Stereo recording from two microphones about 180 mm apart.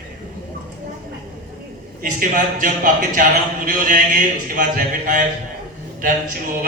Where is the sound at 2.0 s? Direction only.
50° right (ahead or behind).